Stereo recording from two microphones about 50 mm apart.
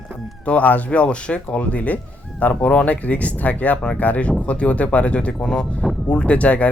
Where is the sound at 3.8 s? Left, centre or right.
Left.